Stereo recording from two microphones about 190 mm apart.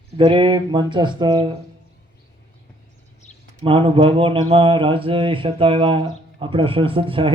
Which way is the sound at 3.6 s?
30° right (ahead or behind).